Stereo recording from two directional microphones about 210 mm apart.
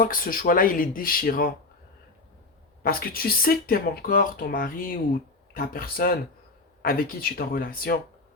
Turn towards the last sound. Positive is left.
turn(degrees=45)  # may be behind; listen again after turning